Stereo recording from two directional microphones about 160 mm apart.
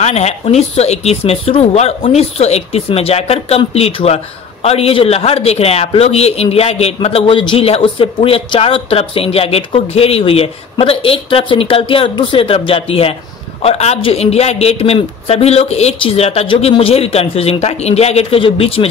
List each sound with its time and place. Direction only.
0.0 s a man's voice: 40° left (ahead or behind)